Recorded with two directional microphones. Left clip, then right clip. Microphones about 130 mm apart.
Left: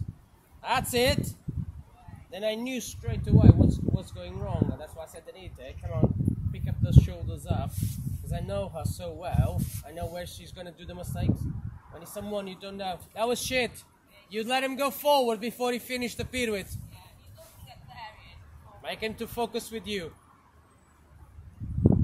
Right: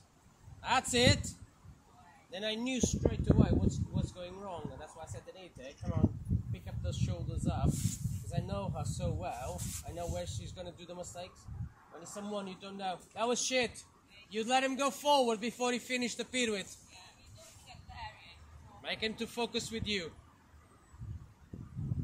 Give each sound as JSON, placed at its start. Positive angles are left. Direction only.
{"t": 0.6, "sound": "a man's voice", "side_deg": 60}
{"t": 2.3, "sound": "speech", "side_deg": 65}
{"t": 7.7, "sound": "speech", "side_deg": -60}
{"t": 8.3, "sound": "speech", "side_deg": 60}
{"t": 9.6, "sound": "speech", "side_deg": -60}
{"t": 9.8, "sound": "speech", "side_deg": 55}
{"t": 17.6, "sound": "a sound", "side_deg": 5}
{"t": 18.8, "sound": "speech", "side_deg": 55}